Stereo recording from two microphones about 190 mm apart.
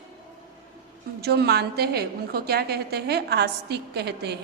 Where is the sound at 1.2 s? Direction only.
60° right (ahead or behind).